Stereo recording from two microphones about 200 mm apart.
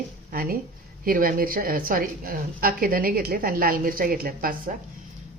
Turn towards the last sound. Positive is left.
turn(degrees=-45)  # may be behind; listen again after turning